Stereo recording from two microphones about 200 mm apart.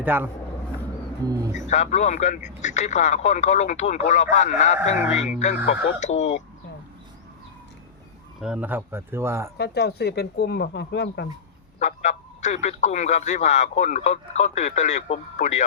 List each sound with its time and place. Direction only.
0.0 s speech: 10° right (ahead or behind)
1.5 s speech: 35° left (ahead or behind)
8.4 s speech: 5° right (ahead or behind)
9.6 s speech: 55° left (ahead or behind)
11.8 s speech: 35° left (ahead or behind)